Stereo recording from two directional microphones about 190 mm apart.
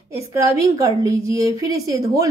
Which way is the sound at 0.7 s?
15° right (ahead or behind).